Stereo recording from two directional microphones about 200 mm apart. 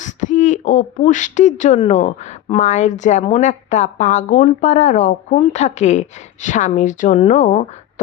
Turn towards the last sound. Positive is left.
turn(degrees=35)  # may be behind; listen again after turning